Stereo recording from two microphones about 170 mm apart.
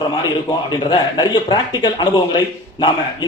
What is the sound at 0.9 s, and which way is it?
A man's voice, 25° left (ahead or behind).